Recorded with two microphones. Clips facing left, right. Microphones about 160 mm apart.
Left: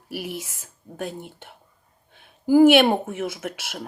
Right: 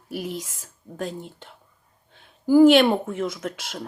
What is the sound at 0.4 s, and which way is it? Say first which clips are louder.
Speech: even; 65° left (ahead or behind).